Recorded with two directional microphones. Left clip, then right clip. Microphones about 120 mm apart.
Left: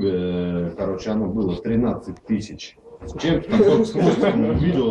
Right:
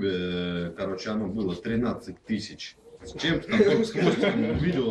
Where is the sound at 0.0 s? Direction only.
35° right (ahead or behind).